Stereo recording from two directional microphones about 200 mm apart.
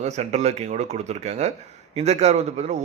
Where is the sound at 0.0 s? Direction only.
35° right (ahead or behind).